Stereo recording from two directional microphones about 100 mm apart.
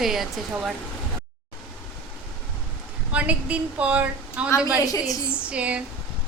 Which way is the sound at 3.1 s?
15° right (ahead or behind).